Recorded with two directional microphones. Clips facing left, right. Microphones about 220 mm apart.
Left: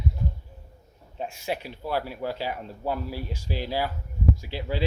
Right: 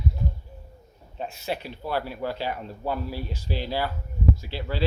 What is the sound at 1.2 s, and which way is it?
Speech, 10° left (ahead or behind).